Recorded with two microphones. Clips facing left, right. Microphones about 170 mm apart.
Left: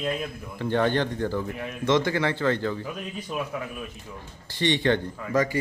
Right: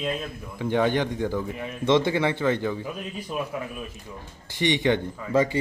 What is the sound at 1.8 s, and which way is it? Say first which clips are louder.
Speech: right 2 dB; 25° right (ahead or behind).